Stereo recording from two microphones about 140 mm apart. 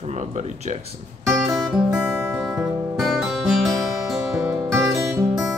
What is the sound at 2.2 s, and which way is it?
Music, 20° right (ahead or behind).